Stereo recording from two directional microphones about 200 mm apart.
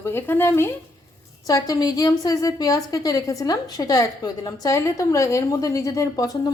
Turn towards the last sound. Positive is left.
turn(degrees=20)  # may be behind; listen again after turning